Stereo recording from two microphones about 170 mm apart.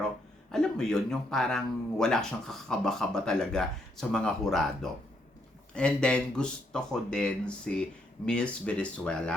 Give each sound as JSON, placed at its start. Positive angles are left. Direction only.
{"t": 0.5, "sound": "speech", "side_deg": 5}